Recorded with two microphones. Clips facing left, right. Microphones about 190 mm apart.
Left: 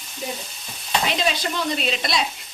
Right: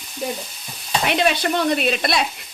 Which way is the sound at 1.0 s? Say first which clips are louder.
Right 7 dB; 65° right (ahead or behind).